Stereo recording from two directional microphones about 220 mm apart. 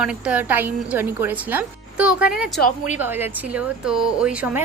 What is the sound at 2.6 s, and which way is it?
Speech, 30° left (ahead or behind).